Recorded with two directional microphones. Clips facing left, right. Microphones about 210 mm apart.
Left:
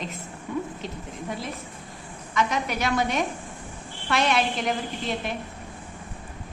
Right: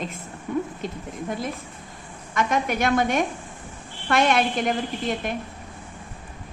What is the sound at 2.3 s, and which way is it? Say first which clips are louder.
A woman's voice: right 3 dB; 50° right (ahead or behind).